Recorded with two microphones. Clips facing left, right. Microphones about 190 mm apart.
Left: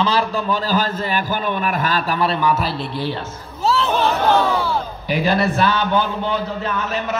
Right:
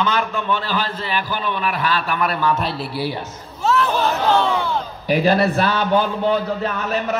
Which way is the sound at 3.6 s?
30° left (ahead or behind).